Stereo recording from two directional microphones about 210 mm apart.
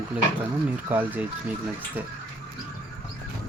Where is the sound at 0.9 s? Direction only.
10° right (ahead or behind).